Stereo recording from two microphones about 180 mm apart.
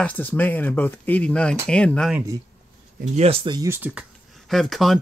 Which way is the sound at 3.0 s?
35° right (ahead or behind).